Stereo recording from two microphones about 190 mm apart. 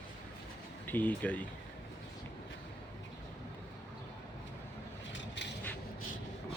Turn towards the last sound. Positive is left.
turn(degrees=70)  # may be behind; listen again after turning